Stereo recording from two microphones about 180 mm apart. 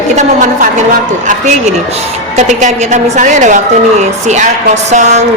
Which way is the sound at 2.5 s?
40° right (ahead or behind).